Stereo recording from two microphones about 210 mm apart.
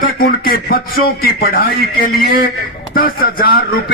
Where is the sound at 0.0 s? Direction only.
45° left (ahead or behind).